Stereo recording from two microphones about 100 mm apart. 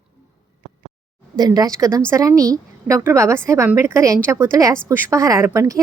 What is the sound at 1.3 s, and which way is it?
A woman's voice, 40° right (ahead or behind).